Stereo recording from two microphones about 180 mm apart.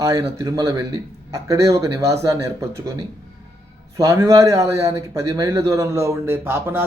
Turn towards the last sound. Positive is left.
turn(degrees=-10)  # may be behind; listen again after turning